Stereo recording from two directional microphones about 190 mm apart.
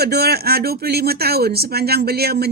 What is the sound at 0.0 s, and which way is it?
Speech, 55° right (ahead or behind).